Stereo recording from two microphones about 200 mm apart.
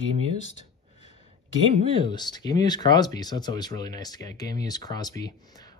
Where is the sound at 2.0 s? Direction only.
20° left (ahead or behind).